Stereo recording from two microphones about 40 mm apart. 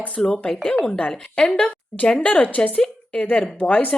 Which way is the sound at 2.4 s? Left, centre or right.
Left.